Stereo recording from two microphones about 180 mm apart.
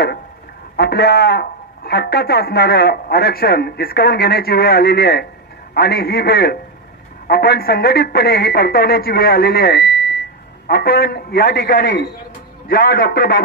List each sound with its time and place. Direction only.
0.7 s speech: 65° left (ahead or behind)